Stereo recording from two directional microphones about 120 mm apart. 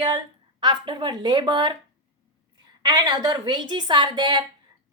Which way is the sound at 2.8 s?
35° right (ahead or behind).